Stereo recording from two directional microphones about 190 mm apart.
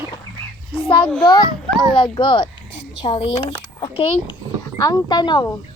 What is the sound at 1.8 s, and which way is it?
Speech, 25° left (ahead or behind).